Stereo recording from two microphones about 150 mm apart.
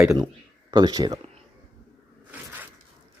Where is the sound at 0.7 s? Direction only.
25° right (ahead or behind).